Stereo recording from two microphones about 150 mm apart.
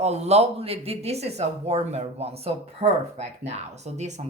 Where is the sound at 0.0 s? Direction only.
45° right (ahead or behind).